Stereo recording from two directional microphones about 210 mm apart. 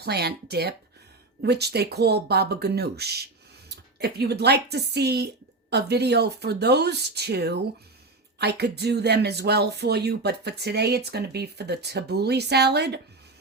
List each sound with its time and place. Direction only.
0.0 s speech: 50° right (ahead or behind)